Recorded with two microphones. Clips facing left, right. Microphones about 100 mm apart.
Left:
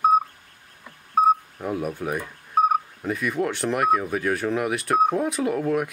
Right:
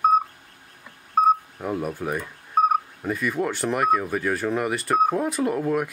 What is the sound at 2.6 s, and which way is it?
Speech, centre (ahead or behind).